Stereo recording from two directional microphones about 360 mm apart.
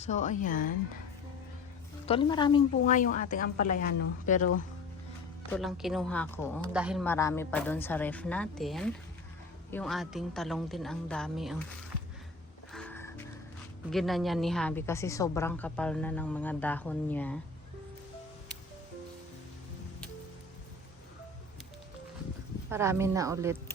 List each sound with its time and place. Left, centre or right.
0.0 s a woman's voice: centre
2.0 s a woman's voice: centre
5.5 s a woman's voice: centre
12.7 s music: centre
13.9 s a woman's voice: centre
22.7 s a woman's voice: centre